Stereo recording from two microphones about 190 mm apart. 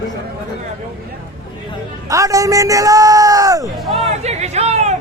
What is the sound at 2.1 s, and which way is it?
A man's voice, 15° right (ahead or behind).